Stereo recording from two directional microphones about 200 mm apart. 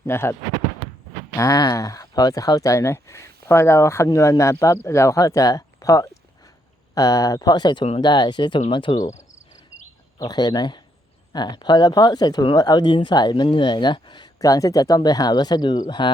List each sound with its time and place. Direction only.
0.0 s speech: 15° left (ahead or behind)
1.4 s speech: 20° left (ahead or behind)
9.1 s cricket: 35° left (ahead or behind)
10.2 s speech: 20° left (ahead or behind)